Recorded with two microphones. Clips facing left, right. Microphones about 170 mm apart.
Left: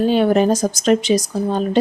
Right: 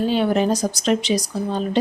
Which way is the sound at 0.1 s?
50° left (ahead or behind).